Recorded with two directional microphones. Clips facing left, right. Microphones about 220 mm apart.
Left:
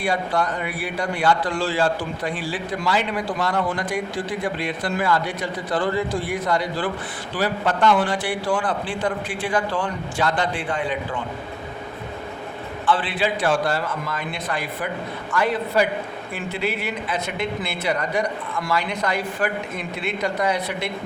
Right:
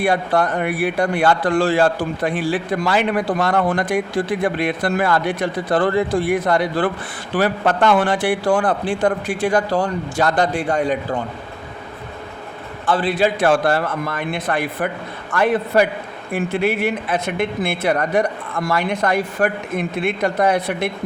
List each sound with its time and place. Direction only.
0.0 s a man's voice: 55° right (ahead or behind)
12.8 s a man's voice: 40° right (ahead or behind)